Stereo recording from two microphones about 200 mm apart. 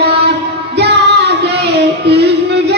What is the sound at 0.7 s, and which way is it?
Music, 55° right (ahead or behind).